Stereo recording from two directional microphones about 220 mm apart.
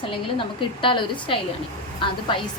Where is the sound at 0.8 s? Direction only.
20° left (ahead or behind).